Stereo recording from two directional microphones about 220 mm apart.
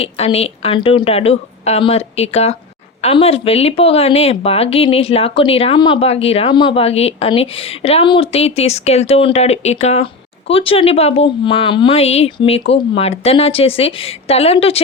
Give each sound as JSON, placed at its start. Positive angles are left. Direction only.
{"t": 0.0, "sound": "speech", "side_deg": 25}